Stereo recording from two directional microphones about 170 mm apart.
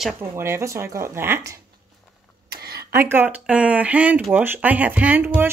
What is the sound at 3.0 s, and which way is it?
Speech, 10° right (ahead or behind).